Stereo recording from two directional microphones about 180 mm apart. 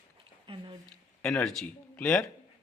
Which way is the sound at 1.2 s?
5° left (ahead or behind).